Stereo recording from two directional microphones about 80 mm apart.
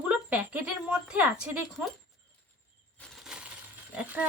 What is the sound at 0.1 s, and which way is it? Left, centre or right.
Speech, centre.